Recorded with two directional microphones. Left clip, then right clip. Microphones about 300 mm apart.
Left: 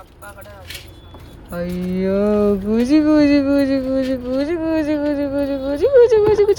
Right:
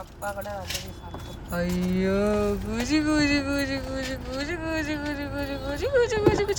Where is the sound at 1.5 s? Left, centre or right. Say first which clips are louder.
Left 4 dB; centre.